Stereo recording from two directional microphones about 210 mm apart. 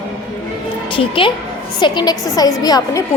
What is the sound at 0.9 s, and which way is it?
A woman's voice, 25° left (ahead or behind).